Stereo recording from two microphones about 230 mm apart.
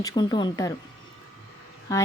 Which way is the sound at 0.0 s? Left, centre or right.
Centre.